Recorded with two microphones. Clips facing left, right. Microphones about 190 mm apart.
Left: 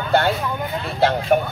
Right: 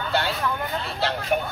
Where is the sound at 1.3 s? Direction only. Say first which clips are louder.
Left 5 dB; 50° left (ahead or behind).